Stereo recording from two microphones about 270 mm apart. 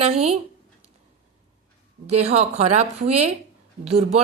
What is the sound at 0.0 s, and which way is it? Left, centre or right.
Speech, right.